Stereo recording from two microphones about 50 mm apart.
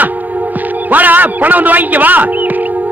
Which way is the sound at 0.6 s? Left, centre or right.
Right.